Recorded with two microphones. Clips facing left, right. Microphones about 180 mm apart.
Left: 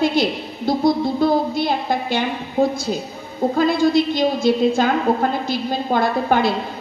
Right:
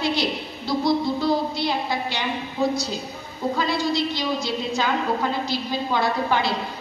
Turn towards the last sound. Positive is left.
turn(degrees=50)  # may be behind; listen again after turning